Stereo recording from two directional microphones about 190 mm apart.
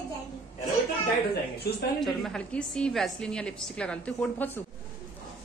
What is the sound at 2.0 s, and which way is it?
A woman's voice, centre (ahead or behind).